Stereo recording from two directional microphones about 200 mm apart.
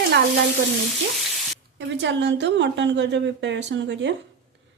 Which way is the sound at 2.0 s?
65° right (ahead or behind).